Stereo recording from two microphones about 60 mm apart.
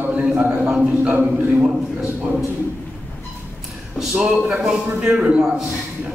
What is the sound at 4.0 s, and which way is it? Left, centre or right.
Speech, centre.